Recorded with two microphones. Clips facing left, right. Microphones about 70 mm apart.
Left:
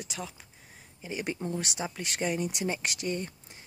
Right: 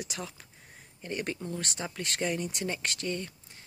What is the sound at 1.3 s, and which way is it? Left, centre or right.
Speech, centre.